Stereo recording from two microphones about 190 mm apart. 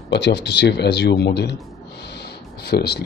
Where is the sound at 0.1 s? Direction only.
65° left (ahead or behind).